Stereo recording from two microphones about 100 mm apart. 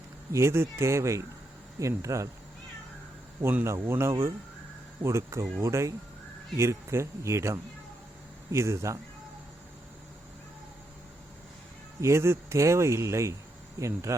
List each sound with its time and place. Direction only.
0.3 s speech: 25° right (ahead or behind)
3.4 s speech: 25° right (ahead or behind)
11.9 s speech: 30° right (ahead or behind)